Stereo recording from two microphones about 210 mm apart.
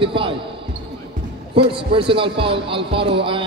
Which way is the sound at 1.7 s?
25° right (ahead or behind).